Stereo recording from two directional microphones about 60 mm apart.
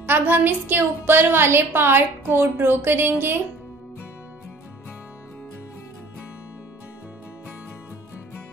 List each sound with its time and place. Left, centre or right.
0.0 s a woman's voice: right